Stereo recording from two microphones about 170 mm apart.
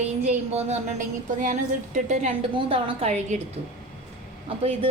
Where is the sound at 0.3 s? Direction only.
40° right (ahead or behind).